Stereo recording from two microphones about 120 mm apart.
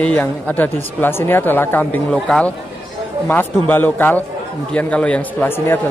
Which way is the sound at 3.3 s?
15° left (ahead or behind).